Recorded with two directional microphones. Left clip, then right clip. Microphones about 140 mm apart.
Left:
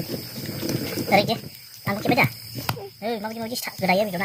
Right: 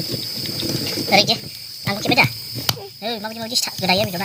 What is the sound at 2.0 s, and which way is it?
Speech, 15° left (ahead or behind).